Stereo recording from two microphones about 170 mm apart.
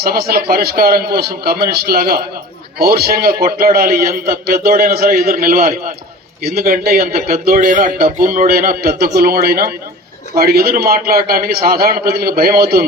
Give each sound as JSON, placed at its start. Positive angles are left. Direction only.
{"t": 0.0, "sound": "a man's voice", "side_deg": -65}